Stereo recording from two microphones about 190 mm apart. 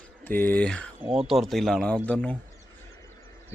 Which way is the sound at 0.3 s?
10° left (ahead or behind).